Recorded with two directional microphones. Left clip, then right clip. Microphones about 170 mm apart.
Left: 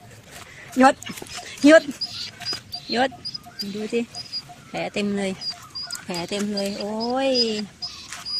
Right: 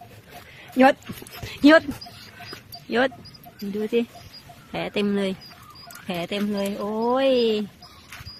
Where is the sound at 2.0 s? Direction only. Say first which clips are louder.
Left 11 dB; 10° left (ahead or behind).